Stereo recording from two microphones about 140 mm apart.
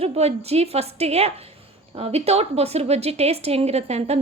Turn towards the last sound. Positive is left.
turn(degrees=-50)  # may be behind; listen again after turning